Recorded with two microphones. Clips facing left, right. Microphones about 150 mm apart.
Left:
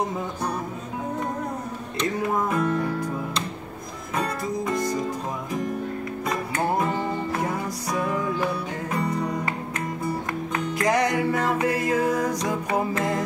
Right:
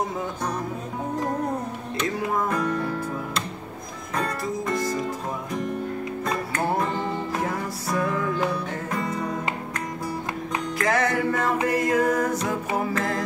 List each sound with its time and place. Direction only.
2.5 s music: 5° left (ahead or behind)
7.9 s music: 10° left (ahead or behind)
10.8 s music: 15° left (ahead or behind)